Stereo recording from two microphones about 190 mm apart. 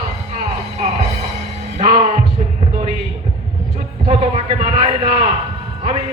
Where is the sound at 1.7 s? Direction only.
35° right (ahead or behind).